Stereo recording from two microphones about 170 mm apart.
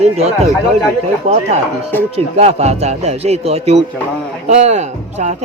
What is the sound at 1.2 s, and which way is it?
Speech, 40° right (ahead or behind).